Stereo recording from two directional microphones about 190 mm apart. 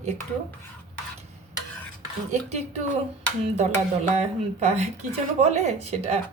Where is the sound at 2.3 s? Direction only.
35° right (ahead or behind).